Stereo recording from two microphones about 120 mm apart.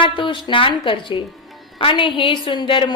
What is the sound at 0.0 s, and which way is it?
A woman's voice, 45° left (ahead or behind).